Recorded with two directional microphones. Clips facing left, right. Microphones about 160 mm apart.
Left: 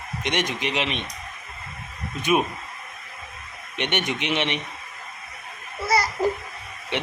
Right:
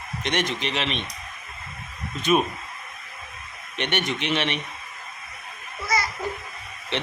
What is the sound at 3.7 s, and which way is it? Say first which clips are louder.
Speech: even; 15° left (ahead or behind).